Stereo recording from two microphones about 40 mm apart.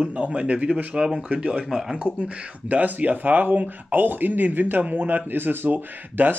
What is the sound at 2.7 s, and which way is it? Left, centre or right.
Speech, right.